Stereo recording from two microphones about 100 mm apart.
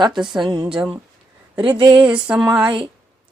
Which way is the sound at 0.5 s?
50° right (ahead or behind).